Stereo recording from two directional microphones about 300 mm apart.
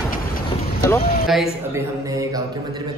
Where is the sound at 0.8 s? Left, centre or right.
Centre.